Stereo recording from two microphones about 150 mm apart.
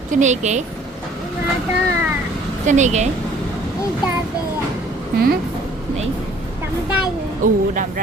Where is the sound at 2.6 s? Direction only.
50° right (ahead or behind).